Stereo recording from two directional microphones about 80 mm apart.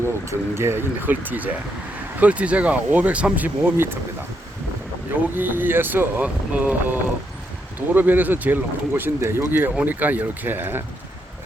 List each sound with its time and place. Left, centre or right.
0.3 s speech: right
5.3 s speech: right